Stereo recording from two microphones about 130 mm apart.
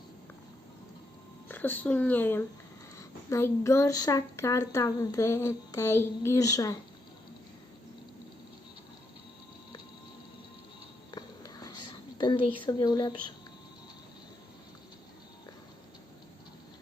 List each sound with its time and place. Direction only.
1.5 s a woman's voice: 15° left (ahead or behind)
11.1 s whispering: 30° left (ahead or behind)
12.6 s speech: 35° left (ahead or behind)